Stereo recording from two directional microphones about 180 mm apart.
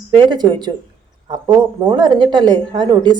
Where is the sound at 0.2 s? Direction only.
25° right (ahead or behind).